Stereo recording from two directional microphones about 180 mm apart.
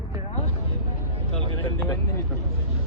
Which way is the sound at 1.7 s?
10° left (ahead or behind).